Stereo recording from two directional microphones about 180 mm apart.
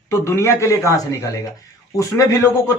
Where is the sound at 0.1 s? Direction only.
15° left (ahead or behind).